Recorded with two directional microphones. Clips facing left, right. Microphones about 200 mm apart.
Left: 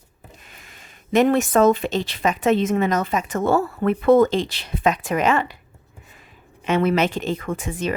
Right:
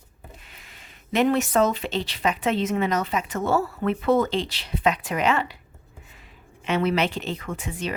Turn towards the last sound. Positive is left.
turn(degrees=45)  # may be behind; listen again after turning